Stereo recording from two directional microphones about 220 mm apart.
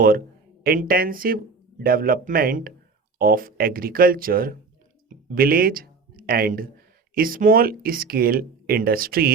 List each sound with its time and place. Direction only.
0.6 s speech: 40° right (ahead or behind)
5.0 s a sound: 40° right (ahead or behind)
7.1 s speech: 40° right (ahead or behind)